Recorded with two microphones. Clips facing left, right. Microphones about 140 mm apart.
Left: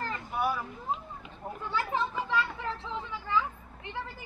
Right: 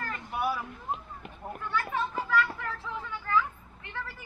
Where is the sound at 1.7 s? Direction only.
25° left (ahead or behind).